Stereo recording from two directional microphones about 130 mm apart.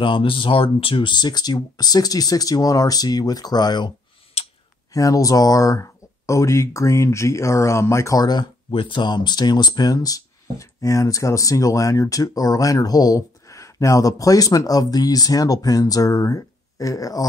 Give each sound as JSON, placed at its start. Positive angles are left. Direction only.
{"t": 0.0, "sound": "speech", "side_deg": 40}
{"t": 4.9, "sound": "speech", "side_deg": 25}